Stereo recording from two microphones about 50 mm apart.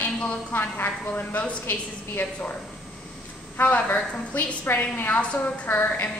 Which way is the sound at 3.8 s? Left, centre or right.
Left.